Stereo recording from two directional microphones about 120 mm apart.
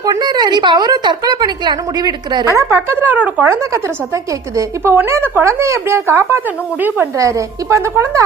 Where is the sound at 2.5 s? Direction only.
20° right (ahead or behind).